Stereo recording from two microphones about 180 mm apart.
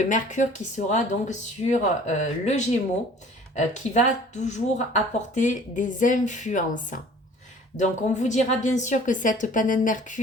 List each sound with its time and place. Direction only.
0.0 s a woman's voice: 45° left (ahead or behind)